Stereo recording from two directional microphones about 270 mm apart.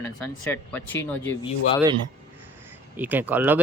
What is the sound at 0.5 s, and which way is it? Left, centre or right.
Speech, centre.